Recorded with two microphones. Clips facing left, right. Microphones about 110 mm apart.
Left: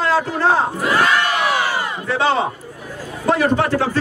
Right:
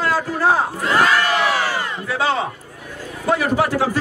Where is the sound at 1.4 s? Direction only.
15° left (ahead or behind).